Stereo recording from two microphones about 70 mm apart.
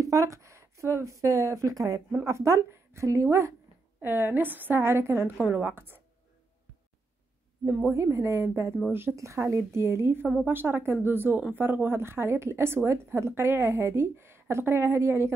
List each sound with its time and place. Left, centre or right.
0.0 s a woman's voice: right
4.0 s a woman's voice: right
7.9 s a woman's voice: right